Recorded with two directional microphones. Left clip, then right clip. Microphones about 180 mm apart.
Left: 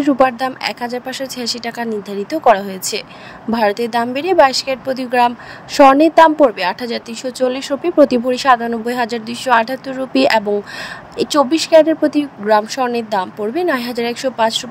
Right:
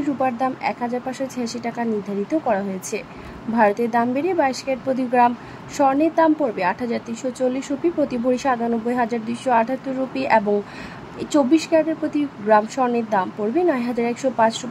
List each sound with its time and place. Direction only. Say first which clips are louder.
0.0 s a woman's voice: left 8 dB; 45° left (ahead or behind)